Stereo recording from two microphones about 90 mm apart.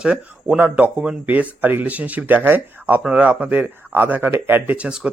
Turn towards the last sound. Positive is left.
turn(degrees=-15)  # may be behind; listen again after turning